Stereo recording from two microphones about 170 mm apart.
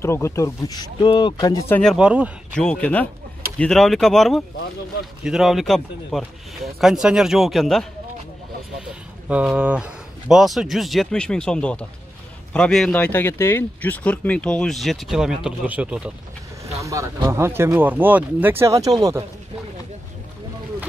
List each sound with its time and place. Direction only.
0.0 s speech: 15° left (ahead or behind)
1.8 s speech: 5° left (ahead or behind)
2.0 s speech: 10° right (ahead or behind)
2.5 s speech: 5° left (ahead or behind)
9.3 s speech: 5° right (ahead or behind)
16.8 s speech: 20° right (ahead or behind)